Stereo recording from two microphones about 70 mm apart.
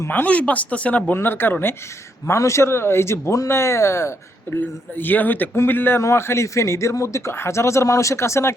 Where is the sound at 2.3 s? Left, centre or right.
Left.